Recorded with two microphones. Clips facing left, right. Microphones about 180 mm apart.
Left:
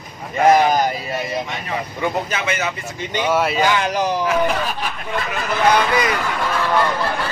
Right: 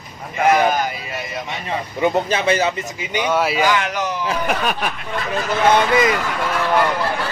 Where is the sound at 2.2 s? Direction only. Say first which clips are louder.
Right 5 dB; 30° right (ahead or behind).